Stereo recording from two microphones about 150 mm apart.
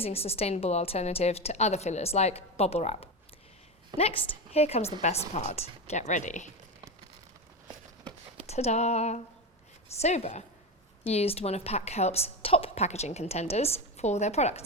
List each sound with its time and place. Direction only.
0.0 s a woman's voice: 40° left (ahead or behind)
3.9 s a woman's voice: 30° right (ahead or behind)
4.5 s a woman's voice: 45° left (ahead or behind)
8.4 s a woman's voice: 45° left (ahead or behind)